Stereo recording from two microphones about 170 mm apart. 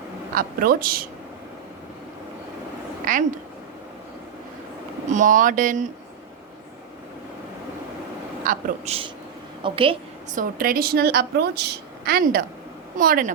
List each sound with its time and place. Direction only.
0.3 s a woman's voice: 60° right (ahead or behind)
3.0 s speech: 50° right (ahead or behind)
5.1 s speech: 50° right (ahead or behind)
8.4 s a man's voice: 40° right (ahead or behind)
10.3 s a woman's voice: 55° right (ahead or behind)